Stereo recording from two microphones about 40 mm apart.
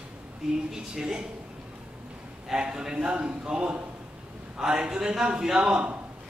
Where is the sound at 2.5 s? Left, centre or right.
Centre.